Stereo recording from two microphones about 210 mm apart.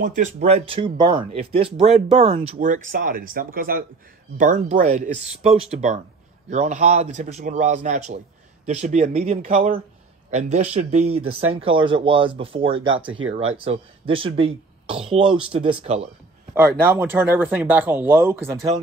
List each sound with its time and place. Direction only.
0.0 s speech: 35° right (ahead or behind)
16.5 s speech: 10° right (ahead or behind)